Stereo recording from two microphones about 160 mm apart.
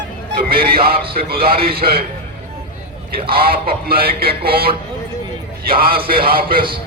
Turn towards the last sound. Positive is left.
turn(degrees=-65)  # may be behind; listen again after turning